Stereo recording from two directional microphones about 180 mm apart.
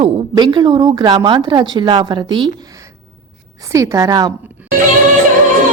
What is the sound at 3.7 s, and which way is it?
Speech, 15° right (ahead or behind).